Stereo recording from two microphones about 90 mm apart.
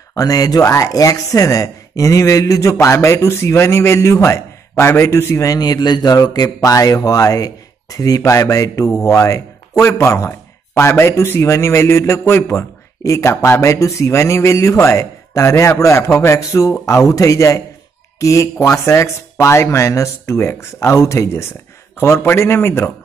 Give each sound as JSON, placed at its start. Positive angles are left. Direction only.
{"t": 0.1, "sound": "speech", "side_deg": 45}